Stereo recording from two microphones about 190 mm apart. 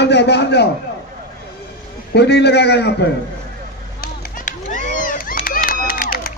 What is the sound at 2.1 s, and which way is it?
Speech, 60° left (ahead or behind).